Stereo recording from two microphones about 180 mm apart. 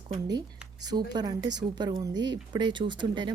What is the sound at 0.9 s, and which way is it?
Speech, 25° right (ahead or behind).